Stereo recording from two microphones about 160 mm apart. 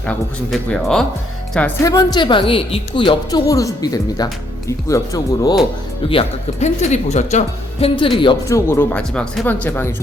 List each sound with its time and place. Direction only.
0.0 s speech: 5° left (ahead or behind)
1.8 s speech: 20° left (ahead or behind)
6.1 s speech: 40° left (ahead or behind)
8.4 s speech: 20° left (ahead or behind)